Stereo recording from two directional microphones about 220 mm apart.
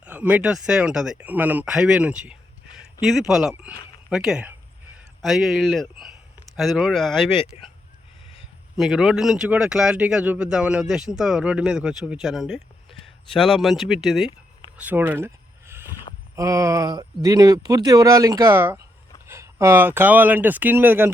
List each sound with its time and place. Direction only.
0.0 s speech: 5° right (ahead or behind)
7.5 s speech: 30° left (ahead or behind)
8.8 s speech: centre (ahead or behind)
14.8 s a sound: 5° right (ahead or behind)
16.3 s speech: 15° right (ahead or behind)